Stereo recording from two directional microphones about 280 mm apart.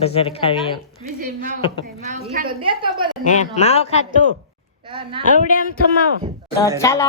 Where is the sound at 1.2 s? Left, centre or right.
Right.